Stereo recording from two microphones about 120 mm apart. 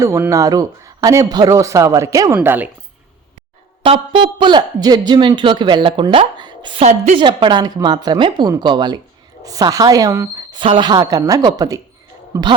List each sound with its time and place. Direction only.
0.0 s speech: 25° right (ahead or behind)
2.4 s speech: 15° right (ahead or behind)
3.8 s a man's voice: 50° right (ahead or behind)
6.8 s a woman's voice: 75° right (ahead or behind)
7.2 s a man's voice: 40° right (ahead or behind)
10.6 s a man's voice: 40° right (ahead or behind)